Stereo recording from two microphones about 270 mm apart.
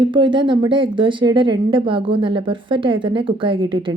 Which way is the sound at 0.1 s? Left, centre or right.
Centre.